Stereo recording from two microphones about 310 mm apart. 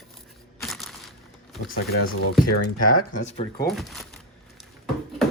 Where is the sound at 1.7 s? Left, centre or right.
Left.